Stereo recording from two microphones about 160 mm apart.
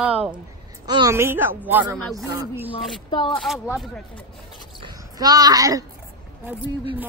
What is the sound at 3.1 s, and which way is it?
Speech, 30° left (ahead or behind).